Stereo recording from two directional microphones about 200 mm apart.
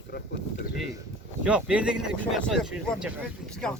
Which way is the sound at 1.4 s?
5° right (ahead or behind).